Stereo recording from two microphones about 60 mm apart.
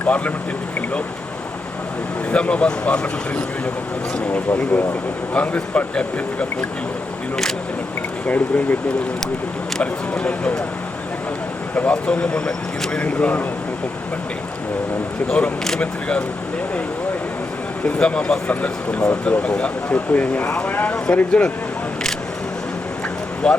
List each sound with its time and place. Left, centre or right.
0.0 s speech: left
2.3 s speech: centre
8.3 s speech: left
9.8 s speech: left
11.7 s speech: left
15.3 s speech: left
17.8 s speech: centre
23.4 s speech: centre